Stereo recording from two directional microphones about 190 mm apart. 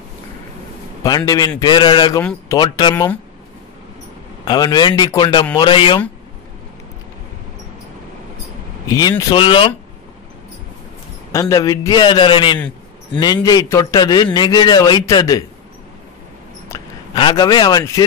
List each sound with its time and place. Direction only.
1.0 s a man's voice: 20° left (ahead or behind)
4.5 s a man's voice: 20° left (ahead or behind)
8.8 s a man's voice: 20° left (ahead or behind)
11.3 s a man's voice: 15° left (ahead or behind)
16.6 s a sound: 15° left (ahead or behind)
17.2 s a man's voice: 25° left (ahead or behind)